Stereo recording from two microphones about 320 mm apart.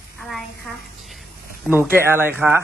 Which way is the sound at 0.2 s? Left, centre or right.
Centre.